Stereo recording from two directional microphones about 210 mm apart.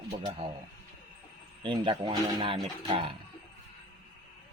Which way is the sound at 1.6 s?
25° right (ahead or behind).